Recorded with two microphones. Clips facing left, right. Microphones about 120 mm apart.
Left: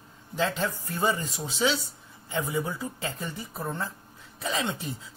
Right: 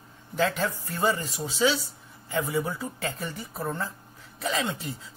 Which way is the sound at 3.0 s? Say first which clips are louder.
Right 1 dB; 20° left (ahead or behind).